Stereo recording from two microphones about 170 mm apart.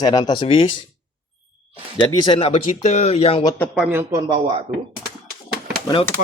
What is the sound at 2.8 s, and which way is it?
Speech, 40° left (ahead or behind).